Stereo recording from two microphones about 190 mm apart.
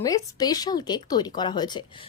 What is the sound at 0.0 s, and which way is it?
Speech, 20° left (ahead or behind).